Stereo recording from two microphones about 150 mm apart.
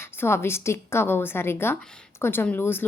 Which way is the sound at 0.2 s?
15° left (ahead or behind).